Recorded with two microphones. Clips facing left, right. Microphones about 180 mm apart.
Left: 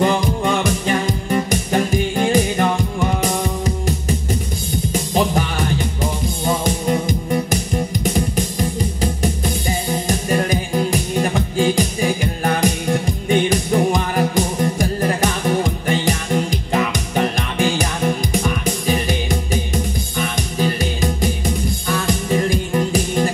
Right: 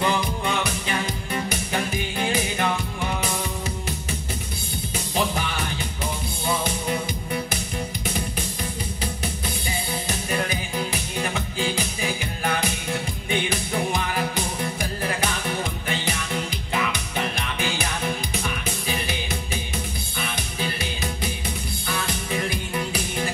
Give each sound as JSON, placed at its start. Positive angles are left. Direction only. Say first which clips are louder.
{"t": 0.0, "sound": "music", "louder": "left 7 dB", "side_deg": 45}